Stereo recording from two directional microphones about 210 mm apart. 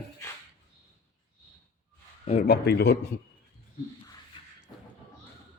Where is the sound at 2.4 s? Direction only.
50° left (ahead or behind).